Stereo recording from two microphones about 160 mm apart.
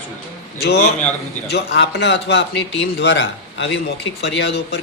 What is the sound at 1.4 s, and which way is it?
Speech, 90° left.